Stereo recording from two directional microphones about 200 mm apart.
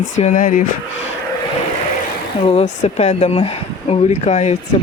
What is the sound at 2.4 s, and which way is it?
Speech, 35° left (ahead or behind).